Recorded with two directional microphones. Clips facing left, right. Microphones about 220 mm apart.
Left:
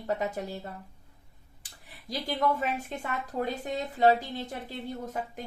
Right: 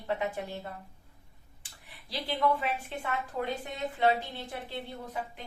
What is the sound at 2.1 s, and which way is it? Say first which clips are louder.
Speech: left 1 dB; 45° left (ahead or behind).